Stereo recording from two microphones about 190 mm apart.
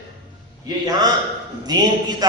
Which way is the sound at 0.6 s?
20° right (ahead or behind).